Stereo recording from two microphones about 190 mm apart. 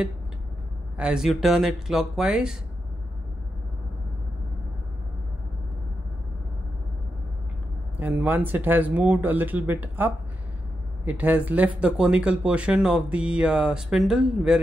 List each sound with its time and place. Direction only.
0.9 s speech: 5° right (ahead or behind)
8.0 s speech: 10° right (ahead or behind)